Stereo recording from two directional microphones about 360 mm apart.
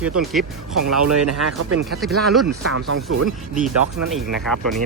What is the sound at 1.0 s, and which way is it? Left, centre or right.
Speech, right.